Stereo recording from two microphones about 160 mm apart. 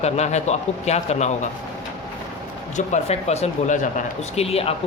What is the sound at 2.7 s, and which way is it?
Speech, 45° left (ahead or behind).